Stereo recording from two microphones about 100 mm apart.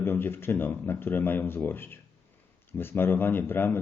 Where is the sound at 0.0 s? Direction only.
20° left (ahead or behind).